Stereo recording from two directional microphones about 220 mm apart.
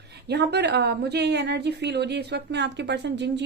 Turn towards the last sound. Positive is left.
turn(degrees=-50)  # may be behind; listen again after turning